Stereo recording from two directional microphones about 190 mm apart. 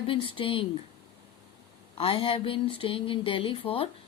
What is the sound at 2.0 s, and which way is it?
Speech, 30° left (ahead or behind).